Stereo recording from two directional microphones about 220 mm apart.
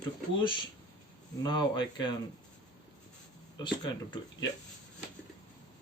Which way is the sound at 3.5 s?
20° left (ahead or behind).